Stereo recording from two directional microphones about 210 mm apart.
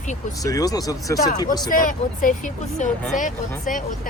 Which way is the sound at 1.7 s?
40° left (ahead or behind).